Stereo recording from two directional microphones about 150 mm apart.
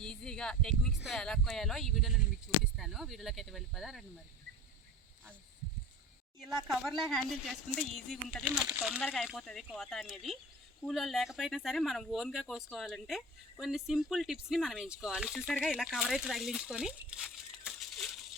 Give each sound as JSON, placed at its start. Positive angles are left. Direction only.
{"t": 0.0, "sound": "speech", "side_deg": 5}
{"t": 6.7, "sound": "speech", "side_deg": 0}